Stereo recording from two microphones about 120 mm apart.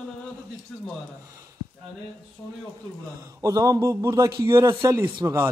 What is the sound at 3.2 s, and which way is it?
A man's voice, 25° right (ahead or behind).